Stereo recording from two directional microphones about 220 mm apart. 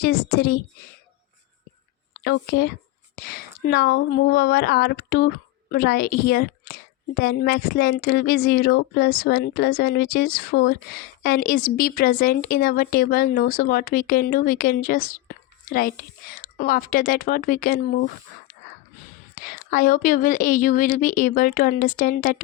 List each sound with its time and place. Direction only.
0.0 s a woman's voice: 45° left (ahead or behind)
2.1 s a woman's voice: 50° left (ahead or behind)
19.4 s speech: 35° left (ahead or behind)